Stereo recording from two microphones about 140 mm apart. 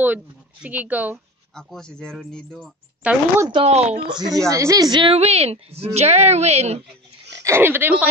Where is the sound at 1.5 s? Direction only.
5° left (ahead or behind).